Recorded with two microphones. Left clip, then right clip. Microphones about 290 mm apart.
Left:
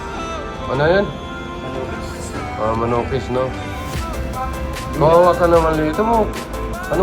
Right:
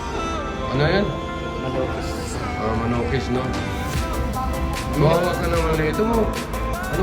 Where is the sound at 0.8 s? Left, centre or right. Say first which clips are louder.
Left 6 dB; centre.